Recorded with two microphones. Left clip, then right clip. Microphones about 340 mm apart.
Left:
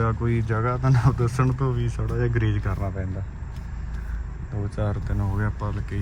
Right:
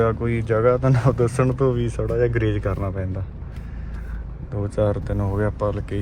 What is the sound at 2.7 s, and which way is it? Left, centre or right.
Speech, right.